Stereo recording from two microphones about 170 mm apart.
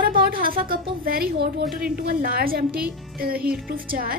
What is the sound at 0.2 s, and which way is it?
A woman's voice, 60° right (ahead or behind).